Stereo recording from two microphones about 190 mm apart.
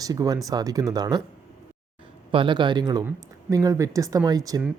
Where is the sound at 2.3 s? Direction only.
25° right (ahead or behind).